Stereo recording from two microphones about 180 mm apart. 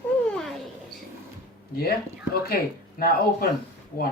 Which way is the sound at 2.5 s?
55° left (ahead or behind).